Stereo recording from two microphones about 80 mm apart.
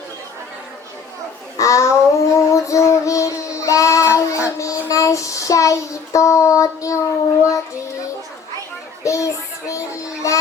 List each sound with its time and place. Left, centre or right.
1.5 s child singing: left
9.0 s child singing: left